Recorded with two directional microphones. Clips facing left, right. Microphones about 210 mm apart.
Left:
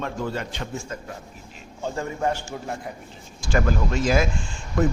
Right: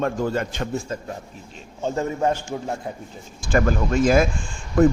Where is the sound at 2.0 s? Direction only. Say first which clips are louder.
Right 4 dB; 25° right (ahead or behind).